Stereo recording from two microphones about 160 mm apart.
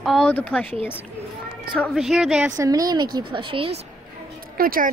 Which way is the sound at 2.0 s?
Centre (ahead or behind).